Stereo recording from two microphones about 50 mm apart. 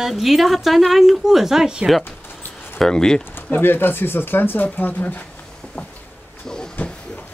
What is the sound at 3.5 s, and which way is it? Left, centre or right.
Speech, left.